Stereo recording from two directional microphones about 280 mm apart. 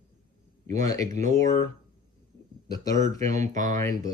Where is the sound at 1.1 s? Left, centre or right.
Right.